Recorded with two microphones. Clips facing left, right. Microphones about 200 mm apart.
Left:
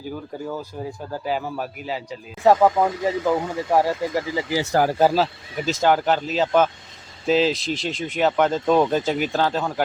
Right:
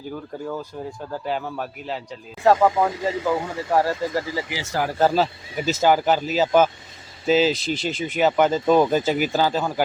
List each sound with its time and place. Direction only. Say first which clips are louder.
1.2 s speech: left 2 dB; 5° left (ahead or behind)
4.8 s speech: left 4 dB; 45° left (ahead or behind)
5.1 s speech: even; centre (ahead or behind)